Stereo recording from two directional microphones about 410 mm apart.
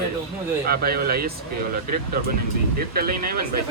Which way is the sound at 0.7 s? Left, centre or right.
Right.